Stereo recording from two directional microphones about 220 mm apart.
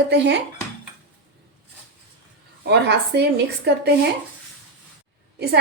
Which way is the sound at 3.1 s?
50° right (ahead or behind).